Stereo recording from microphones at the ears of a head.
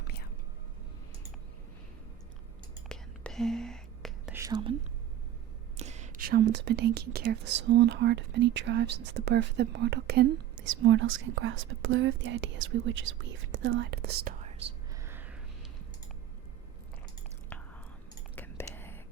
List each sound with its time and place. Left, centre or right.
2.9 s whispering: centre
4.4 s speech: right